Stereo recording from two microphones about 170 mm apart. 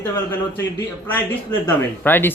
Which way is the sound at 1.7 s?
10° left (ahead or behind).